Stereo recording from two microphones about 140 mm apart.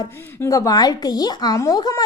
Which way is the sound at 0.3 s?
20° left (ahead or behind).